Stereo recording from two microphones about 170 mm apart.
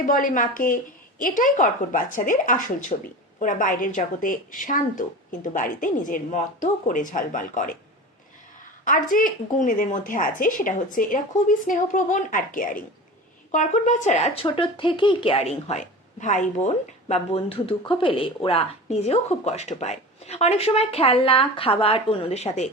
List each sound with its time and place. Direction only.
0.0 s a woman's voice: 50° left (ahead or behind)
8.8 s a woman's voice: 50° left (ahead or behind)
14.4 s speech: 30° left (ahead or behind)